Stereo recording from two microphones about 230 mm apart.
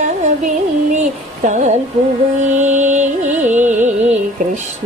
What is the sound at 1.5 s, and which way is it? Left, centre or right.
Music, right.